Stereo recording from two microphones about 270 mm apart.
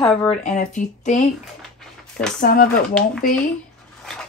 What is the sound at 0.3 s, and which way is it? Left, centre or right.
Speech, left.